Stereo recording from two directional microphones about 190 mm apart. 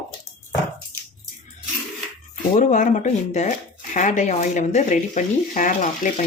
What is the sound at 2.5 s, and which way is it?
Speech, 40° left (ahead or behind).